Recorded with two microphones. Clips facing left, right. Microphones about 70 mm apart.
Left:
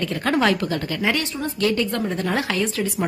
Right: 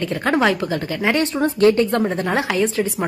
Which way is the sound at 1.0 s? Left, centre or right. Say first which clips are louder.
Right 7 dB; right.